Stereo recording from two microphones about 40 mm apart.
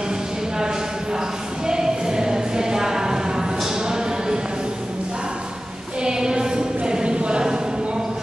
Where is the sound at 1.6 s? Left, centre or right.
Centre.